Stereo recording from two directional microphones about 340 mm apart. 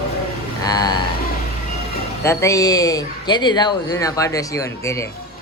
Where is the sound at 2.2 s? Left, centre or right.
Centre.